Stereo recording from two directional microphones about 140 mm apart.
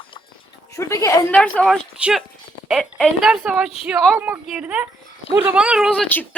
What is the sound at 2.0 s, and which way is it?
Speech, 5° right (ahead or behind).